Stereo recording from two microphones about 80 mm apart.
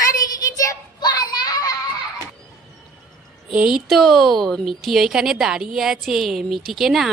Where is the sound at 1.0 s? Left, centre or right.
Left.